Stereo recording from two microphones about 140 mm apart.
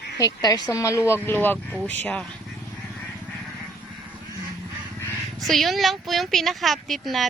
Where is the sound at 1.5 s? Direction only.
10° right (ahead or behind).